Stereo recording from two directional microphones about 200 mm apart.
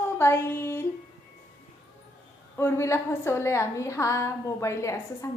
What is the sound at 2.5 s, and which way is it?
Speech, 10° left (ahead or behind).